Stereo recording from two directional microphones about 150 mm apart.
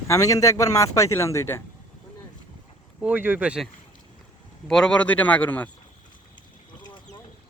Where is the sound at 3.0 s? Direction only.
10° right (ahead or behind).